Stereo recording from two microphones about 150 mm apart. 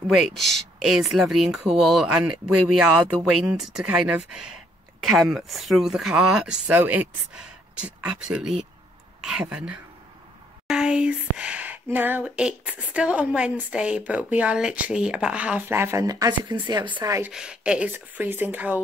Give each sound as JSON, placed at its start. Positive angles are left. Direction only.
{"t": 0.1, "sound": "speech", "side_deg": 0}
{"t": 17.3, "sound": "speech", "side_deg": -5}